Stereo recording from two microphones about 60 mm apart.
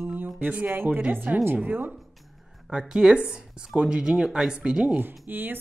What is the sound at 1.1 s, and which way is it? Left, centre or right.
Speech, right.